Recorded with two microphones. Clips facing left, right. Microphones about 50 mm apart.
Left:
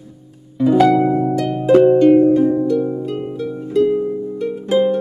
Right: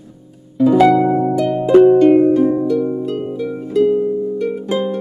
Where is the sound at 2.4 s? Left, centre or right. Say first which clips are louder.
Right 1 dB; centre.